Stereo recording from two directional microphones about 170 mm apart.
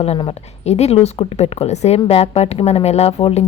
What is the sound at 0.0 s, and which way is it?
A woman's voice, 35° left (ahead or behind).